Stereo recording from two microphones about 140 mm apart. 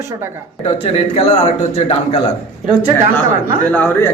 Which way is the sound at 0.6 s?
45° left (ahead or behind).